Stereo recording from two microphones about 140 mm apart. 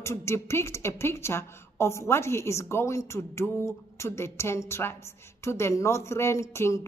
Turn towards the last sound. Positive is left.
turn(degrees=20)  # may be behind; listen again after turning